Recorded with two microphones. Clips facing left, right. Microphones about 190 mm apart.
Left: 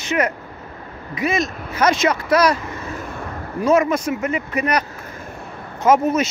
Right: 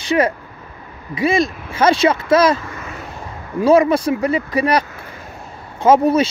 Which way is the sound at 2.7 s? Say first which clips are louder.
Left 2 dB; 30° left (ahead or behind).